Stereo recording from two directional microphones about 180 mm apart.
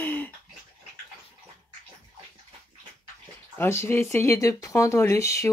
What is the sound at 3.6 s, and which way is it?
Speech, 15° left (ahead or behind).